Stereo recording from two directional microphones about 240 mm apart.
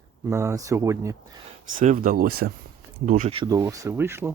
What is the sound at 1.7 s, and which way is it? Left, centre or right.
Speech, right.